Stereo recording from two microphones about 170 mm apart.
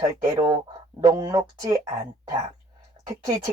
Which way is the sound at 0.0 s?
20° right (ahead or behind).